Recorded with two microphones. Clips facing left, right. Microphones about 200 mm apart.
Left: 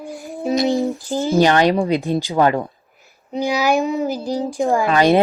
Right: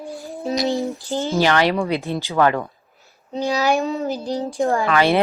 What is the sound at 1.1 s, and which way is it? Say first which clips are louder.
Speech: left 4 dB; 15° left (ahead or behind).